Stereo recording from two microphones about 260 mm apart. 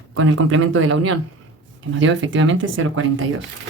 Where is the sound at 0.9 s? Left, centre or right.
Right.